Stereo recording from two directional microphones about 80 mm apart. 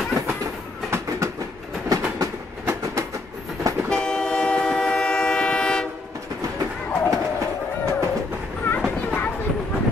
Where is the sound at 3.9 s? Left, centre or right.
Centre.